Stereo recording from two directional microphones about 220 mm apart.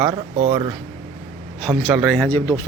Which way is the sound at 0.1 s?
35° right (ahead or behind).